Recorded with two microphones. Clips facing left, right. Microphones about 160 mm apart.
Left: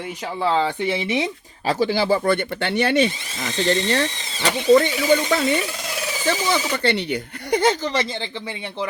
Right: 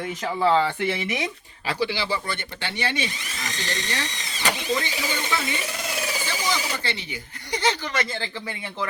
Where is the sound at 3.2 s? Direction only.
25° left (ahead or behind).